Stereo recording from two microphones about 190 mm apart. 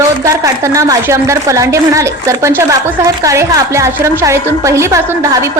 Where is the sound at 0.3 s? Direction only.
15° right (ahead or behind).